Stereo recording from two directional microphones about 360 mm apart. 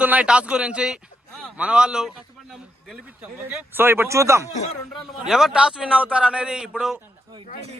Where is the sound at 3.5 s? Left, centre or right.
Centre.